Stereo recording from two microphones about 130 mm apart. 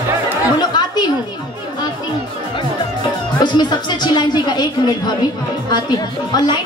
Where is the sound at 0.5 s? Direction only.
35° left (ahead or behind).